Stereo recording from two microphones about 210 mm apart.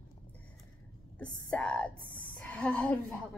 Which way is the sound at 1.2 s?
5° left (ahead or behind).